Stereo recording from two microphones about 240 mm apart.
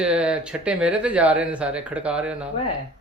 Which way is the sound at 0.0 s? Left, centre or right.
Centre.